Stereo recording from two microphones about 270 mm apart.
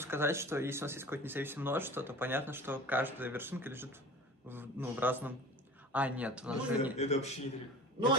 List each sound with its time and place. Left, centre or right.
0.0 s speech: centre
7.0 s a man's voice: left